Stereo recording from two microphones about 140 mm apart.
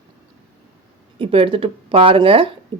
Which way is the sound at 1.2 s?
40° right (ahead or behind).